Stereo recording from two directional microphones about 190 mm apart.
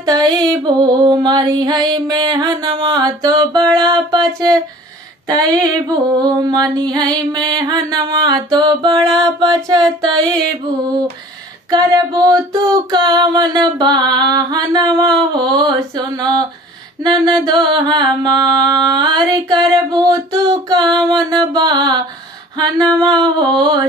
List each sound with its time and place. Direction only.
0.0 s music: 20° right (ahead or behind)
11.7 s music: 20° right (ahead or behind)